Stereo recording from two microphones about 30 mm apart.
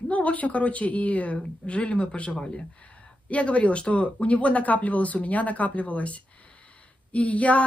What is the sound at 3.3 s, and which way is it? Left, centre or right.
Speech, left.